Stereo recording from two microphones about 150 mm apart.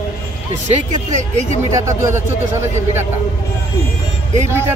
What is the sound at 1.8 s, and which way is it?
Speech, 20° right (ahead or behind).